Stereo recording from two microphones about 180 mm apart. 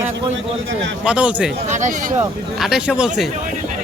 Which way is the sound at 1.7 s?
45° right (ahead or behind).